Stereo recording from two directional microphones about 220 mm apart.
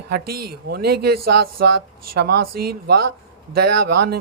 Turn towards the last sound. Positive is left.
turn(degrees=-45)  # may be behind; listen again after turning